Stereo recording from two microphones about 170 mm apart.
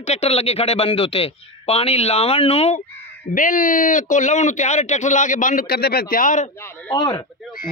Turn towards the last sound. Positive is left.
turn(degrees=20)  # may be behind; listen again after turning